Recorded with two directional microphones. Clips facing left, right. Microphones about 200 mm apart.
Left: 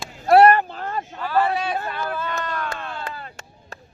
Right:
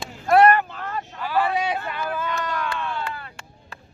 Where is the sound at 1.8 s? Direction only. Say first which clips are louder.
Even; 15° right (ahead or behind).